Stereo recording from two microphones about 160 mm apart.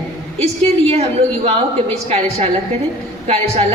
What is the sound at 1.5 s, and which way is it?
A woman's voice, 40° right (ahead or behind).